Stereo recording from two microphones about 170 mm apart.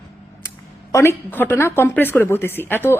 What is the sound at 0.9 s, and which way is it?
A woman's voice, 10° left (ahead or behind).